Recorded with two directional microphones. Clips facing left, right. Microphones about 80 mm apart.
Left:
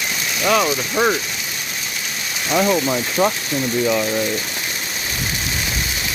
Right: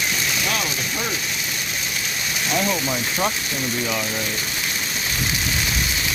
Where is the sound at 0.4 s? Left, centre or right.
Left.